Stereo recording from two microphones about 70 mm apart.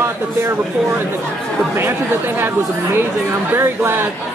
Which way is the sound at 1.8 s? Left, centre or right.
Right.